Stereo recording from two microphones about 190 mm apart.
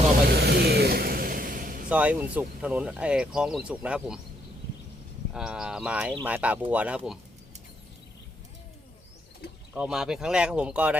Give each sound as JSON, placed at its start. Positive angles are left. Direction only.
{"t": 0.3, "sound": "a sound", "side_deg": -60}
{"t": 1.9, "sound": "speech", "side_deg": -5}
{"t": 5.3, "sound": "speech", "side_deg": -5}
{"t": 9.7, "sound": "speech", "side_deg": -5}